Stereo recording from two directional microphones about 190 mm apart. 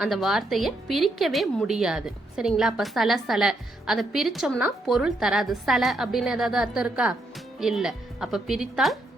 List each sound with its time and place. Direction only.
0.0 s a woman's voice: centre (ahead or behind)